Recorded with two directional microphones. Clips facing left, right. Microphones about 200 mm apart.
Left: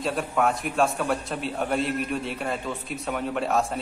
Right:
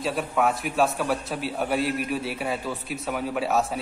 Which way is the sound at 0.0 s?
Centre (ahead or behind).